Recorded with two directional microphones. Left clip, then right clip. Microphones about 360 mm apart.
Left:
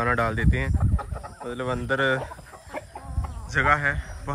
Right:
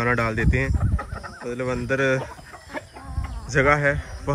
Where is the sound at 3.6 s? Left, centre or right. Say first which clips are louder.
Right 2 dB; centre.